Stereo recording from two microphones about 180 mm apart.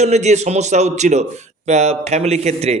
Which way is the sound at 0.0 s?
40° right (ahead or behind).